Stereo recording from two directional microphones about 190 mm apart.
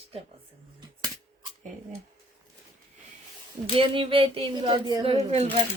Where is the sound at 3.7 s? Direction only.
30° right (ahead or behind).